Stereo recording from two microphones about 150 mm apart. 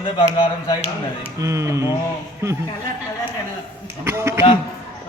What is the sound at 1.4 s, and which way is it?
Speech, 20° right (ahead or behind).